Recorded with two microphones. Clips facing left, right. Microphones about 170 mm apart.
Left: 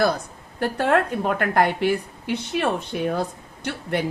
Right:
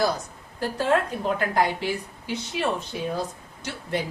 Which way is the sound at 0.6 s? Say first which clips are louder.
Left 3 dB; 65° left (ahead or behind).